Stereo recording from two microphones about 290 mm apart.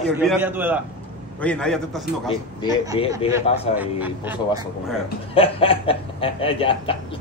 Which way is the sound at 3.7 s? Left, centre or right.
Centre.